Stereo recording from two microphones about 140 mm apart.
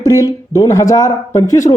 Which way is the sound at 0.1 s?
25° left (ahead or behind).